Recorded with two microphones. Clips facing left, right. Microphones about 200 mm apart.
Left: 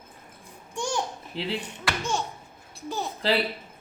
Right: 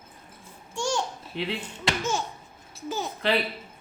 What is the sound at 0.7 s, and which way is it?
Babbling, 15° left (ahead or behind).